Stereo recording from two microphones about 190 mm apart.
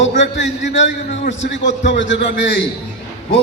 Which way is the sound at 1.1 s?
40° left (ahead or behind).